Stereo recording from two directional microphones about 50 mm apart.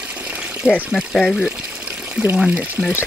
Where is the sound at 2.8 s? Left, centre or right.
Right.